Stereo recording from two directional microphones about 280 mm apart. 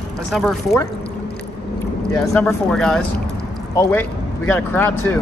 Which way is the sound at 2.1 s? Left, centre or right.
Centre.